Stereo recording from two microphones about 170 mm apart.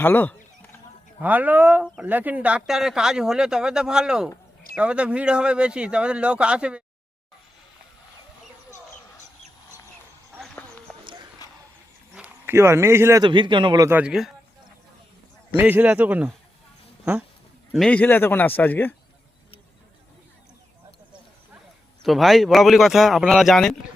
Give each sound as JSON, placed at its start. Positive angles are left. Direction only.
{"t": 0.0, "sound": "a man's voice", "side_deg": 10}
{"t": 1.2, "sound": "speech", "side_deg": -10}
{"t": 11.4, "sound": "a sound", "side_deg": 20}
{"t": 12.1, "sound": "speech", "side_deg": -10}
{"t": 13.2, "sound": "a man's voice", "side_deg": -30}
{"t": 13.8, "sound": "speech", "side_deg": -10}
{"t": 15.5, "sound": "a man's voice", "side_deg": -10}
{"t": 17.7, "sound": "a man's voice", "side_deg": 0}
{"t": 22.0, "sound": "speech", "side_deg": 0}